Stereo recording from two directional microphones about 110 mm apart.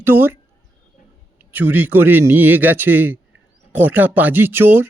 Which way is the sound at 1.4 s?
15° right (ahead or behind).